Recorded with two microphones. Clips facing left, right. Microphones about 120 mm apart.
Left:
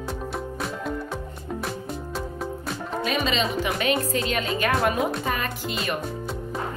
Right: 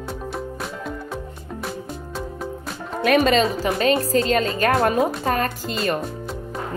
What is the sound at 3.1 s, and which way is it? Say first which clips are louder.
Speech: right 11 dB; 60° right (ahead or behind).